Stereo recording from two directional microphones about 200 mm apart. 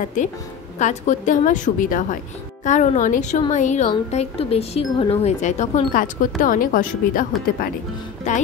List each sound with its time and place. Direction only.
0.7 s speech: 35° left (ahead or behind)